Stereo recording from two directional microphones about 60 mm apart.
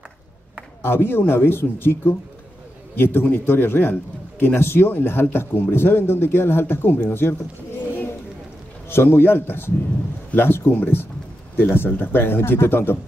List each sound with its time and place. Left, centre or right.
0.8 s speech: left
8.8 s speech: left